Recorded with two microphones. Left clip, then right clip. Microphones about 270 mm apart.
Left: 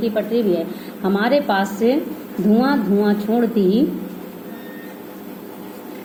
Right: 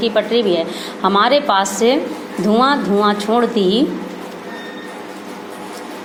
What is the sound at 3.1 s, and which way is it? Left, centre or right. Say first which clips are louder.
Speech: right 4 dB; centre.